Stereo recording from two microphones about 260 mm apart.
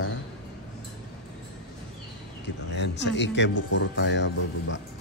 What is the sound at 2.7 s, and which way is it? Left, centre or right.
Speech, left.